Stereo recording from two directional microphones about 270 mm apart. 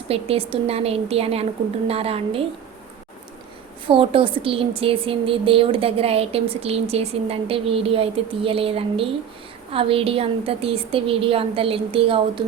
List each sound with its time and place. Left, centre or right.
0.1 s a woman's voice: right
3.8 s a woman's voice: centre